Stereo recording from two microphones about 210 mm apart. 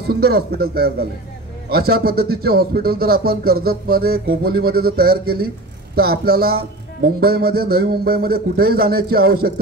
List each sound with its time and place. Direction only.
0.1 s speech: 50° right (ahead or behind)